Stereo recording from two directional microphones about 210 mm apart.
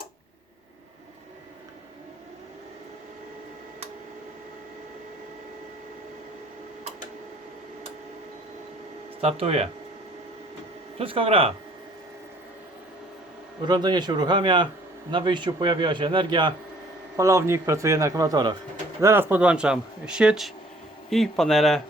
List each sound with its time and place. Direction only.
9.2 s a man's voice: 30° right (ahead or behind)
10.9 s a man's voice: 25° right (ahead or behind)
13.7 s a man's voice: 20° right (ahead or behind); by 21.8 s centre (ahead or behind)